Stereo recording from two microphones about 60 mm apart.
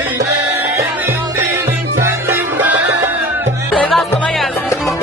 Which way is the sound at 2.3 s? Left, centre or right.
Right.